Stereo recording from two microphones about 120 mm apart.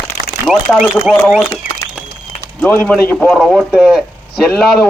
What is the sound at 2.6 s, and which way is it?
Speech, 15° left (ahead or behind).